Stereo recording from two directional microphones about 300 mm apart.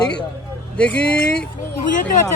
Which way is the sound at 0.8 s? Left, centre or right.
Centre.